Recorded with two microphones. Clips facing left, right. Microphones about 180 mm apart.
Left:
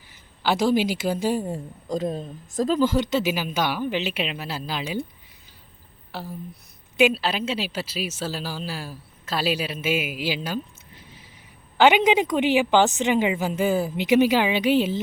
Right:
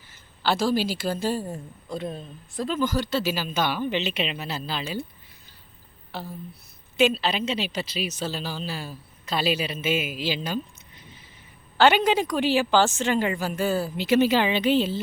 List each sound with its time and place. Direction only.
0.4 s speech: 15° left (ahead or behind)
1.5 s speech: 35° left (ahead or behind); by 5.0 s 15° left (ahead or behind)
6.1 s speech: 10° left (ahead or behind)